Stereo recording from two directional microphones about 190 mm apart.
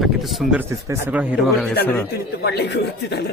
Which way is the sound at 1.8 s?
10° left (ahead or behind).